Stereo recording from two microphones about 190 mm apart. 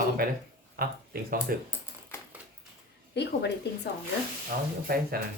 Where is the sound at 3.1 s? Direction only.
65° left (ahead or behind).